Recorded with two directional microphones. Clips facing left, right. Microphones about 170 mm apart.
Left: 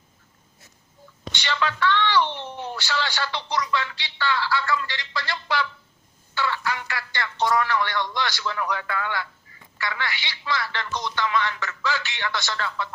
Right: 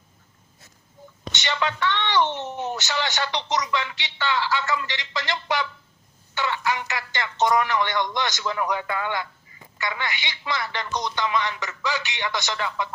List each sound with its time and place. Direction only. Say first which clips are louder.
1.3 s a woman's voice: even; 20° right (ahead or behind)